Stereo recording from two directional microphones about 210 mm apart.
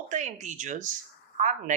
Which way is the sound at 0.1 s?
35° right (ahead or behind).